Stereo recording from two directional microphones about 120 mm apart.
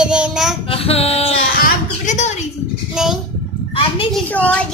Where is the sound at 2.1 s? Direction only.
70° left (ahead or behind).